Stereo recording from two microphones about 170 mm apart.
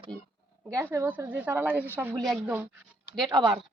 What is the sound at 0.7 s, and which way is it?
A woman's voice, 15° right (ahead or behind).